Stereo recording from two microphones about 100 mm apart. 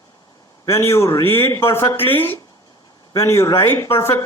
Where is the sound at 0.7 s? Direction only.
25° left (ahead or behind).